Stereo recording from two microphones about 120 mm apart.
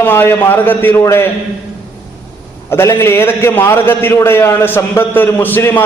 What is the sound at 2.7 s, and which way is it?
A man's voice, 20° left (ahead or behind).